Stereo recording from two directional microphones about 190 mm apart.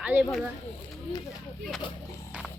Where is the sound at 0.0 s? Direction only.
5° right (ahead or behind).